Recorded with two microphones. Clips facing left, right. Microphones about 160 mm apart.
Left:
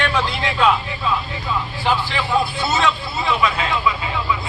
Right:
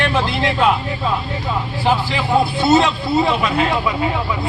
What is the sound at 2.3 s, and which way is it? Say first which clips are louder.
Speech: right 7 dB; 30° right (ahead or behind).